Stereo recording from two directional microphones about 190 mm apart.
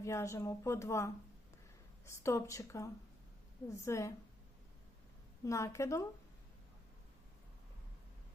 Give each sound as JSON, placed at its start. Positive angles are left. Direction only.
{"t": 0.0, "sound": "speech", "side_deg": 15}
{"t": 5.5, "sound": "speech", "side_deg": 15}